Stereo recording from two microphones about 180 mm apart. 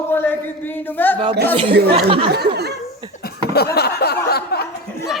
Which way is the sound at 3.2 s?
60° left (ahead or behind).